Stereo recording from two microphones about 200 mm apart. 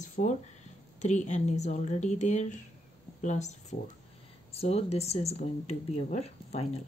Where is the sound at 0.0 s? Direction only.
35° left (ahead or behind).